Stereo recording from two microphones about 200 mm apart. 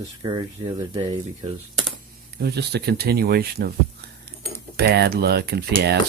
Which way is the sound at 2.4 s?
55° right (ahead or behind).